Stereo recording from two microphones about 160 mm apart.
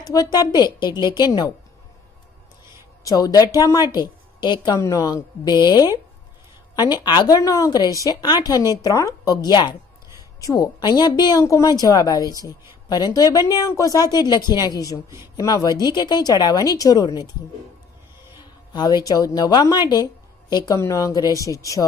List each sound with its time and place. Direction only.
0.1 s a woman's voice: 25° left (ahead or behind)
3.0 s a woman's voice: 20° left (ahead or behind)
18.7 s a woman's voice: 25° left (ahead or behind)